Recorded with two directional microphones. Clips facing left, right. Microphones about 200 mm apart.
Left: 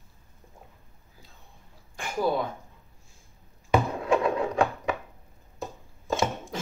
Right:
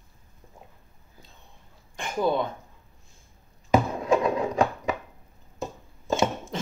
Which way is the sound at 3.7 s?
40° right (ahead or behind).